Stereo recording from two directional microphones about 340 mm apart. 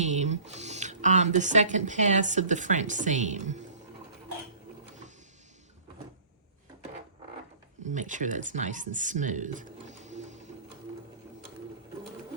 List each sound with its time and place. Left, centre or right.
0.0 s speech: right
7.9 s speech: right